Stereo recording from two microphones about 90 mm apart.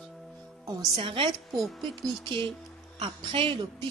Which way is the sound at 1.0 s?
80° right.